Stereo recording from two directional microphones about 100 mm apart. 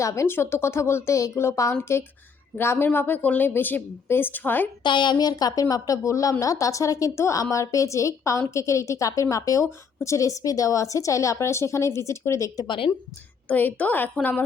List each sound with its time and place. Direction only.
0.0 s a woman's voice: 30° left (ahead or behind)
4.8 s speech: 50° left (ahead or behind); by 12.6 s 30° left (ahead or behind)
12.6 s a woman's voice: 60° left (ahead or behind)
13.5 s a woman's voice: 15° left (ahead or behind)